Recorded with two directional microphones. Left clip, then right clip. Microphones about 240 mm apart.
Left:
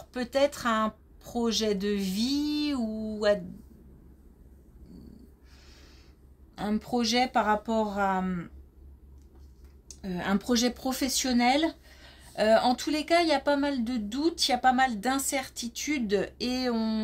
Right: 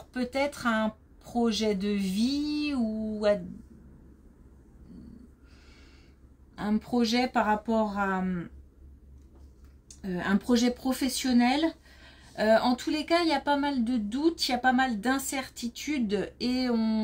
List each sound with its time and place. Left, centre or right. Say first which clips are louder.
0.1 s speech: left 3 dB; left
6.5 s speech: even; left
10.0 s speech: right 1 dB; left